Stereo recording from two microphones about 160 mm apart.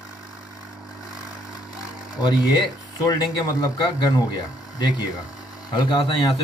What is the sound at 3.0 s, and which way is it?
Speech, 20° left (ahead or behind).